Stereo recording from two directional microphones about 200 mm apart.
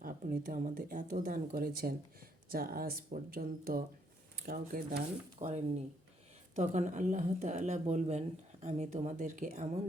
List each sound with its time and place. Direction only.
0.0 s speech: 45° right (ahead or behind)
5.4 s speech: 30° right (ahead or behind)
6.6 s speech: 40° right (ahead or behind)